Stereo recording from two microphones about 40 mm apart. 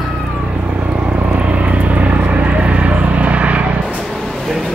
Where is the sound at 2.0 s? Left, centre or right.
Right.